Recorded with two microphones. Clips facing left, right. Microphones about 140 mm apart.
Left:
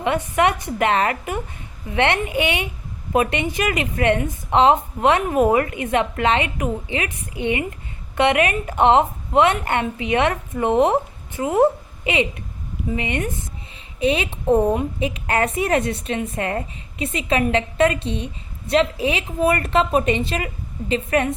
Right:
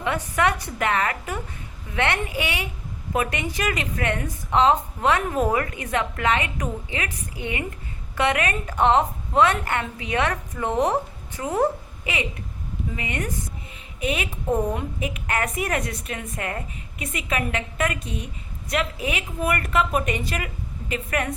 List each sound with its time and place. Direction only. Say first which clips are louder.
0.0 s a woman's voice: left 4 dB; 20° left (ahead or behind)